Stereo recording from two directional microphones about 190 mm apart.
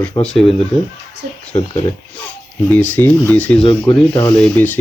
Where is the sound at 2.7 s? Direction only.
10° left (ahead or behind).